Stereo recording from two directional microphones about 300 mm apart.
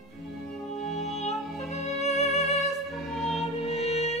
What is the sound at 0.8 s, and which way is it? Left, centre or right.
Music, left.